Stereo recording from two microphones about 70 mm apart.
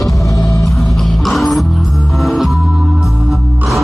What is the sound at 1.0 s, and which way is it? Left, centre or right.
Music, centre.